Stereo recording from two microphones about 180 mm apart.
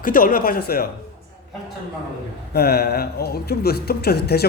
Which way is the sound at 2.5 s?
60° left (ahead or behind).